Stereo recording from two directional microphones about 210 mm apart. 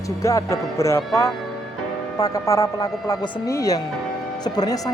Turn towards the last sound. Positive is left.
turn(degrees=15)  # may be behind; listen again after turning